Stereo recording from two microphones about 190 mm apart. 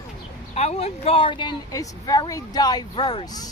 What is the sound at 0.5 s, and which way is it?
Speech, 35° left (ahead or behind).